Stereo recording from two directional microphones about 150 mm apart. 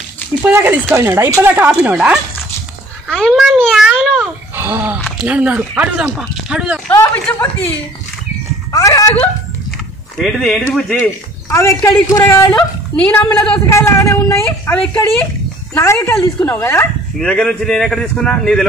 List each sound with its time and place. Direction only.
0.4 s speech: 10° right (ahead or behind)
3.1 s speech: centre (ahead or behind)
3.6 s babbling: centre (ahead or behind); by 4.9 s 15° right (ahead or behind)
5.0 s speech: 5° right (ahead or behind)
6.9 s speech: 15° left (ahead or behind)
8.7 s speech: 25° left (ahead or behind)
10.1 s speech: centre (ahead or behind)
11.5 s speech: 20° left (ahead or behind)
13.1 s speech: 10° left (ahead or behind)
13.7 s speech: 20° left (ahead or behind)
17.2 s speech: 5° left (ahead or behind)